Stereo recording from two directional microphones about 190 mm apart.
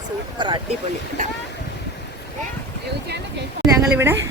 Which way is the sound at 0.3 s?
25° right (ahead or behind).